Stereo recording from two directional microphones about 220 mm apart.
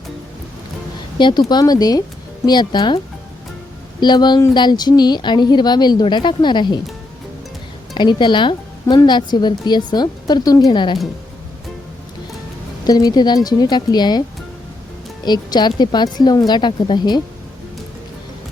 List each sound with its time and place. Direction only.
1.2 s a woman's voice: 20° left (ahead or behind)
4.0 s a woman's voice: 20° left (ahead or behind)
7.9 s a woman's voice: 20° left (ahead or behind)
12.8 s a woman's voice: 15° left (ahead or behind)